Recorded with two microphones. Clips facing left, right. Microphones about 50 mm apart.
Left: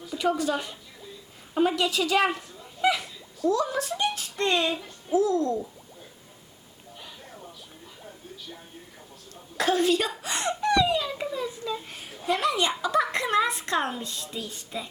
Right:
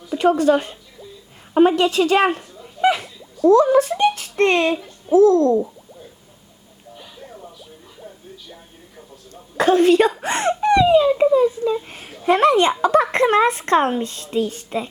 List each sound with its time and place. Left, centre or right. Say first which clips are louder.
0.2 s speech: right 10 dB; right
3.5 s a child's voice: right 15 dB; right
4.8 s music: right 5 dB; centre
5.1 s speech: right 11 dB; right
6.9 s a sound: right 5 dB; centre
9.3 s a sound: right 9 dB; right
10.2 s speech: right 9 dB; right
10.6 s a sound: right 10 dB; right
11.1 s a child's voice: right 17 dB; centre
11.3 s speech: right 14 dB; right